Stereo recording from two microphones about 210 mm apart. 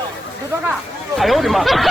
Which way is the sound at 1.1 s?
Centre (ahead or behind).